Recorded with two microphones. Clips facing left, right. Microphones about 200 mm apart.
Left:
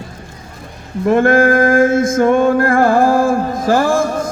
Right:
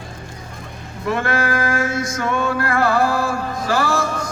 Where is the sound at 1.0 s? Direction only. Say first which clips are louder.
Left 10 dB; 50° left (ahead or behind).